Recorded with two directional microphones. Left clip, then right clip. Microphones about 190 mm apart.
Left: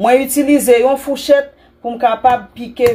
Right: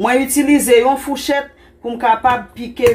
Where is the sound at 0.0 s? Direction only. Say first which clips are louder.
Left 3 dB; 45° left (ahead or behind).